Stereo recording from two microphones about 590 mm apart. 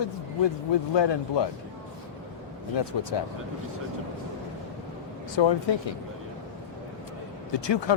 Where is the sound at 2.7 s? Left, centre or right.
Left.